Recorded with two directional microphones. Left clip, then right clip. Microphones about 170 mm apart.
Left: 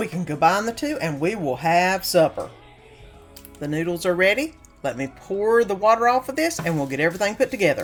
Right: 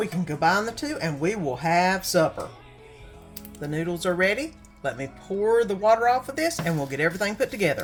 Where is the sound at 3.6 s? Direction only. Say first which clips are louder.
Left 4 dB; 30° left (ahead or behind).